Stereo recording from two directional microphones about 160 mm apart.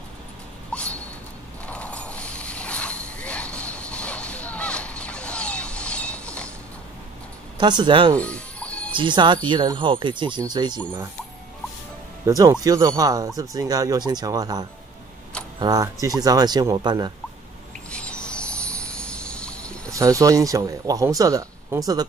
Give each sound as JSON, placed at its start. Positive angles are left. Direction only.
{"t": 0.7, "sound": "dog", "side_deg": 5}
{"t": 1.7, "sound": "mechanisms", "side_deg": 10}
{"t": 7.5, "sound": "speech", "side_deg": -30}
{"t": 8.2, "sound": "music", "side_deg": 10}
{"t": 8.9, "sound": "speech", "side_deg": -30}
{"t": 12.3, "sound": "speech", "side_deg": -20}
{"t": 17.9, "sound": "vehicle", "side_deg": 5}
{"t": 19.9, "sound": "speech", "side_deg": -20}